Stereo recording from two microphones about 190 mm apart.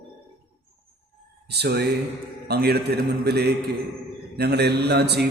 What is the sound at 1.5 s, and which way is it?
A man's voice, 60° right (ahead or behind).